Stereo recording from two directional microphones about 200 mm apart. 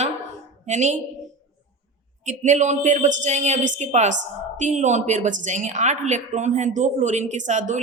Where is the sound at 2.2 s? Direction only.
35° right (ahead or behind).